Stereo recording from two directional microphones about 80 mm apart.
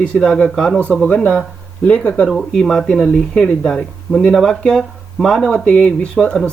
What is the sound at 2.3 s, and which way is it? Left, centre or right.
Speech, centre.